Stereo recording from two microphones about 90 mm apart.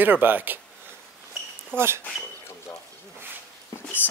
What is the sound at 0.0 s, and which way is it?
Speech, 20° right (ahead or behind).